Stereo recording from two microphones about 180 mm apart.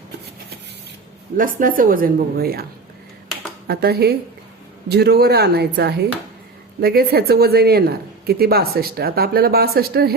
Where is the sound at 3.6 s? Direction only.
60° right (ahead or behind).